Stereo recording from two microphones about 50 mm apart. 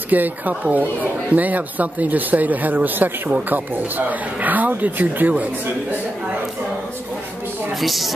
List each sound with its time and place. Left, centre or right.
0.1 s speech: right
7.8 s speech: centre